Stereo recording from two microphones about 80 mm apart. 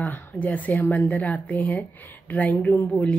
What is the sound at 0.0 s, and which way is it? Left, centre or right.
A woman's voice, centre.